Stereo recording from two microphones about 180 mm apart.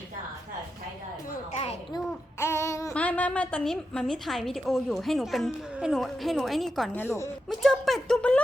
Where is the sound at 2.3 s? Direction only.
15° left (ahead or behind).